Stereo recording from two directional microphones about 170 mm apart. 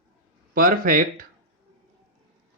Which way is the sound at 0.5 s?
55° right (ahead or behind).